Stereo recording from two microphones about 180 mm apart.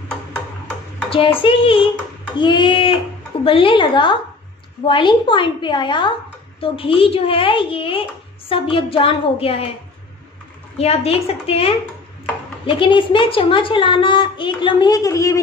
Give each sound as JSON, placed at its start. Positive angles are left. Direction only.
{"t": 1.4, "sound": "a woman's voice", "side_deg": 30}
{"t": 10.8, "sound": "a woman's voice", "side_deg": 35}